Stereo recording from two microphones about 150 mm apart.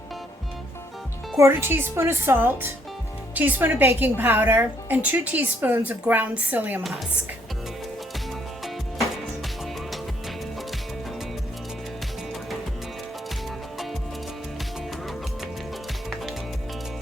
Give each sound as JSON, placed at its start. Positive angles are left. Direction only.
{"t": 1.4, "sound": "a woman's voice", "side_deg": -15}